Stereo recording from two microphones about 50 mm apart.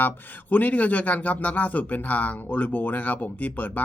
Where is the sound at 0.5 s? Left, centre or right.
Left.